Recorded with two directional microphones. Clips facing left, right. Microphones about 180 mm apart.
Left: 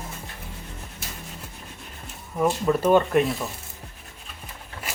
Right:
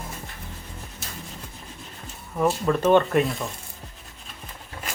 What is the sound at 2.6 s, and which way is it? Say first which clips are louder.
Speech: even; 10° left (ahead or behind).